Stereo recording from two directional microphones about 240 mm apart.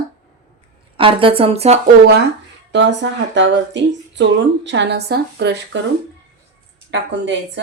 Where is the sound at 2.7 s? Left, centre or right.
Right.